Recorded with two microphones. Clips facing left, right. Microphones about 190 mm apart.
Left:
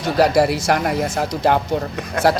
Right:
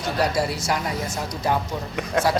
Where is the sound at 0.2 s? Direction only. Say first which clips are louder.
Left 9 dB; 80° left.